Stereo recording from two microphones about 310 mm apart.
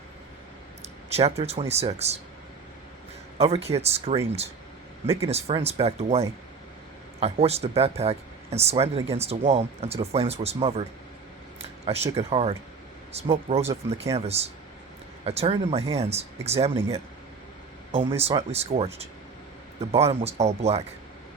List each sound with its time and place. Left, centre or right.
1.1 s speech: centre
3.3 s speech: centre
5.3 s speech: centre
12.1 s speech: centre
18.2 s speech: centre